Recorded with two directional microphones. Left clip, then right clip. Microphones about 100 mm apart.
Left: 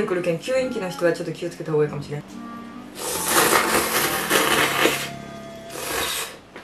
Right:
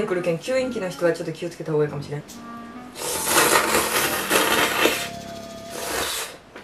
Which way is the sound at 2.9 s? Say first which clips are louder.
Even; 15° right (ahead or behind).